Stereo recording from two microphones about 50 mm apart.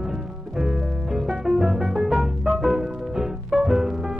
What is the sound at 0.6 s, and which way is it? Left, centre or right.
Music, centre.